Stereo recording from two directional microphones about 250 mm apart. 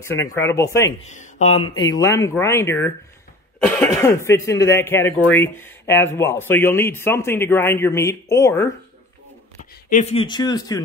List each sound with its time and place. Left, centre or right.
0.0 s speech: centre
1.0 s speech: left
1.7 s speech: centre
9.6 s speech: left; by 10.8 s centre